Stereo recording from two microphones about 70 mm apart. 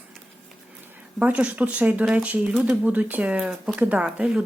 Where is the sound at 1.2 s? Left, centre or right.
Right.